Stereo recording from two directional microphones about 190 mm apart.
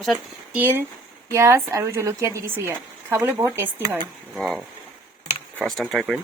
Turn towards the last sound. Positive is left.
turn(degrees=0)  # may be behind; listen again after turning